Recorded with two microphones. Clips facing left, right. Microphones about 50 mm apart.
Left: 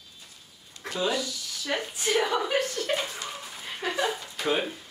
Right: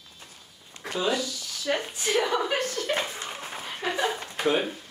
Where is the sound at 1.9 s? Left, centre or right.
Centre.